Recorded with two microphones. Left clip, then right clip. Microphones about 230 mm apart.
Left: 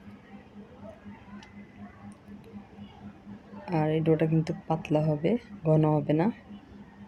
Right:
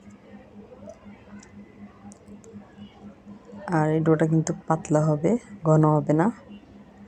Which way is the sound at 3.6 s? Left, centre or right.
Centre.